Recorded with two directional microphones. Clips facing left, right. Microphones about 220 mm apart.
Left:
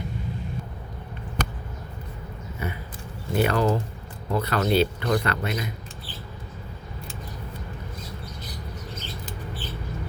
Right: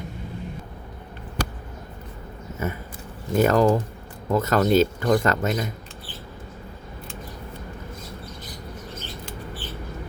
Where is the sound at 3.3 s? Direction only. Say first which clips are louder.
Right 4 dB; 45° right (ahead or behind).